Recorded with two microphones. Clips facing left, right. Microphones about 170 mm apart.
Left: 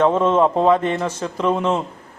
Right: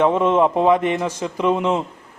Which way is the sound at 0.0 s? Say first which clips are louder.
Even; 15° right (ahead or behind).